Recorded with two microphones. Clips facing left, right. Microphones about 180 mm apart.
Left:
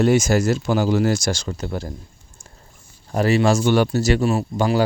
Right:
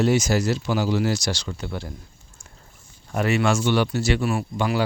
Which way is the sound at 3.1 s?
35° left (ahead or behind).